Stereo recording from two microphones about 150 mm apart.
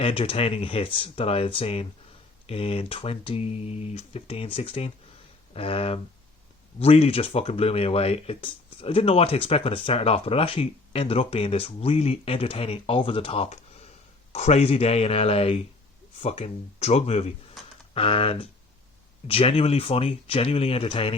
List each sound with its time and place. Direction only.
0.0 s speech: 40° left (ahead or behind)